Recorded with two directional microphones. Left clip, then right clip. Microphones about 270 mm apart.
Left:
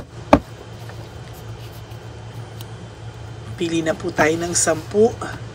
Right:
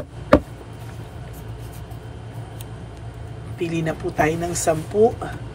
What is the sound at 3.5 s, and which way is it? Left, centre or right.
Speech, centre.